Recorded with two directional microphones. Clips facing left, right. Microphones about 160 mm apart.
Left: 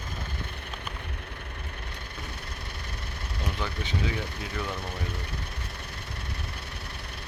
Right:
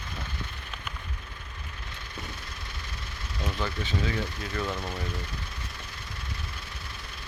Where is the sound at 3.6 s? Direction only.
15° left (ahead or behind).